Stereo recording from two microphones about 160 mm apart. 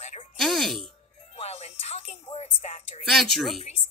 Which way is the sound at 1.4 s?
40° left (ahead or behind).